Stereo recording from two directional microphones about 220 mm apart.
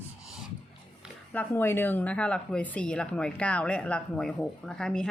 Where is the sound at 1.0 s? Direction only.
5° left (ahead or behind).